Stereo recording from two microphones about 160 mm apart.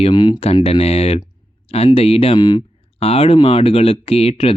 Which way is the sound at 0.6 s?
40° left (ahead or behind).